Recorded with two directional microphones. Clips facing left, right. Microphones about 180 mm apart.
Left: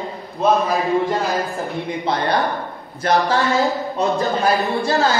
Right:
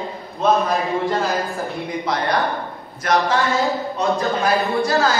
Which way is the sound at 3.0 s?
30° left (ahead or behind).